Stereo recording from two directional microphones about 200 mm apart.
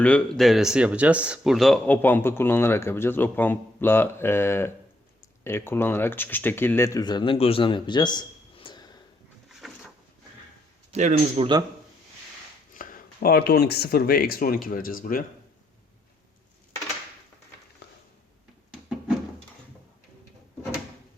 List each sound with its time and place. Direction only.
0.0 s speech: 5° left (ahead or behind); by 8.9 s 25° left (ahead or behind)
9.6 s a sound: centre (ahead or behind)
10.9 s speech: 30° right (ahead or behind)
12.7 s speech: 45° left (ahead or behind)